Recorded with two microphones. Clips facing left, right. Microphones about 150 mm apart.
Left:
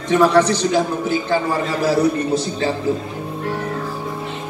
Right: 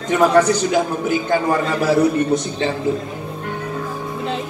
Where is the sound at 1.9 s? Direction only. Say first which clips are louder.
Right 1 dB; 35° left (ahead or behind).